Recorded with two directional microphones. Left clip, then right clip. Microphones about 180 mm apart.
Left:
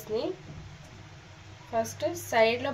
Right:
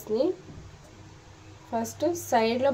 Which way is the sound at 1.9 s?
55° right (ahead or behind).